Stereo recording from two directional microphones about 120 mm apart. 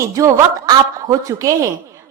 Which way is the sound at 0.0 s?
25° right (ahead or behind).